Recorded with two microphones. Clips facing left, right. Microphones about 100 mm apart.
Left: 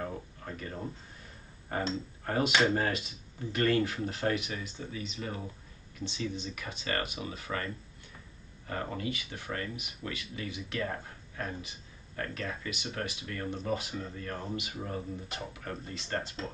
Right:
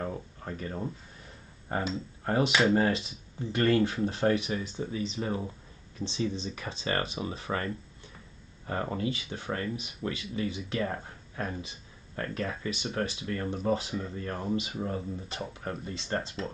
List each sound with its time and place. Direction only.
0.5 s speech: 30° right (ahead or behind)